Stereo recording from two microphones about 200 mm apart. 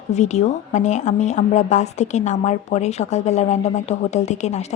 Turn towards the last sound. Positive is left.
turn(degrees=35)  # may be behind; listen again after turning